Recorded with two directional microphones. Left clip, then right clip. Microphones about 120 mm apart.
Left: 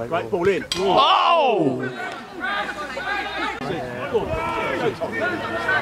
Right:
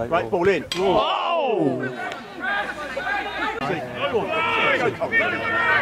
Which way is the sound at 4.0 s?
20° right (ahead or behind).